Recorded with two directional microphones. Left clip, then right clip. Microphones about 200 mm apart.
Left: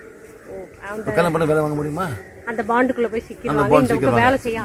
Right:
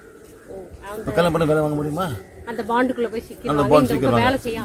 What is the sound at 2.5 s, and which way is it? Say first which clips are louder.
Speech: left 2 dB; 10° left (ahead or behind).